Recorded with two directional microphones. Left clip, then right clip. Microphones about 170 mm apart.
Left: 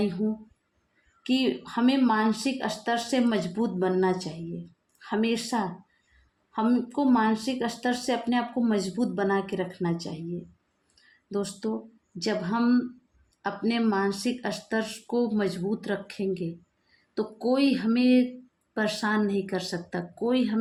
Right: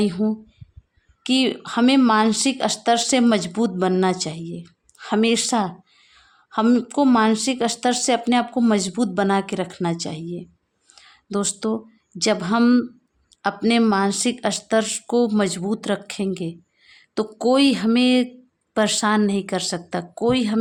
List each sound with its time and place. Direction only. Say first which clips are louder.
0.0 s speech: right 6 dB; 60° right (ahead or behind)
10.9 s a sound: right 5 dB; 65° right (ahead or behind)
12.2 s speech: right 8 dB; 60° right (ahead or behind)